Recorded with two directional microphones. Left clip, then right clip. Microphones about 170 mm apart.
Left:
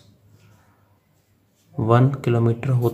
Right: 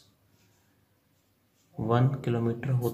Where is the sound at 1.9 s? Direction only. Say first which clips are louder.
Left 9 dB; 40° left (ahead or behind).